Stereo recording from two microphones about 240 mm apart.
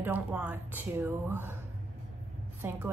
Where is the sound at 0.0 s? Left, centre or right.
Centre.